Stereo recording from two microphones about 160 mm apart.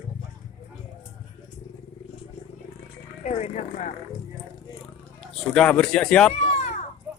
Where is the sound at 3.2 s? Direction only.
45° left (ahead or behind).